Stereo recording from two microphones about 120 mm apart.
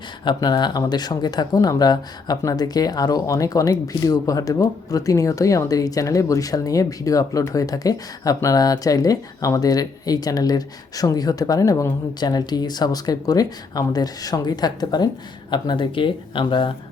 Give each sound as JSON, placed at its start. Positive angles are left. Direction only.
{"t": 0.3, "sound": "speech", "side_deg": 35}